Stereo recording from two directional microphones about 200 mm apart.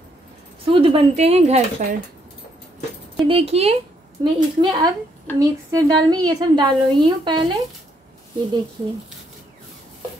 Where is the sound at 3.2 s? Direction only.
30° right (ahead or behind).